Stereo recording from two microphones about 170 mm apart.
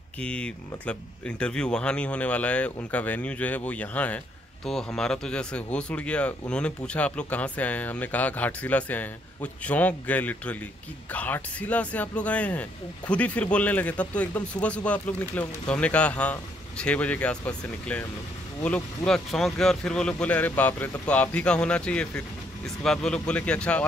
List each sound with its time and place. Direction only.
0.2 s speech: 5° left (ahead or behind)